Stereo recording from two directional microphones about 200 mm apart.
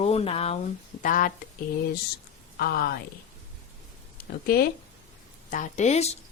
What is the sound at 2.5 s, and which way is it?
Speech, 50° left (ahead or behind).